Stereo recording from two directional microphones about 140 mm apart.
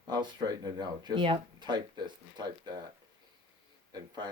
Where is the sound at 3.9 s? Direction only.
30° right (ahead or behind).